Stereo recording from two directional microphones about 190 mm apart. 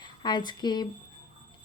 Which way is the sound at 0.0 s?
25° left (ahead or behind).